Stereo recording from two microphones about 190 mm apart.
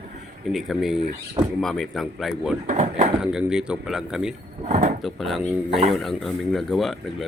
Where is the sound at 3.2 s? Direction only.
5° right (ahead or behind).